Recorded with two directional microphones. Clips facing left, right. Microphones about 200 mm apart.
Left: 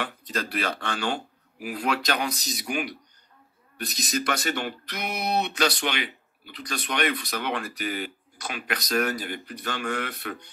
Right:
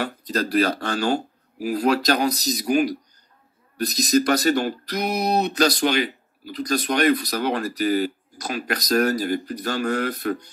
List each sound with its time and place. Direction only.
0.0 s speech: 40° right (ahead or behind)